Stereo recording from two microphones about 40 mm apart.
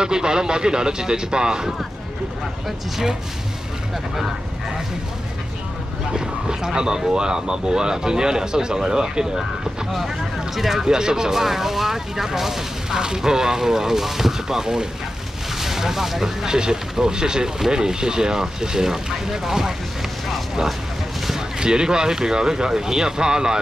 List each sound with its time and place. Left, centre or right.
0.0 s speech: centre
6.1 s speech: centre
9.9 s speech: centre
21.5 s speech: centre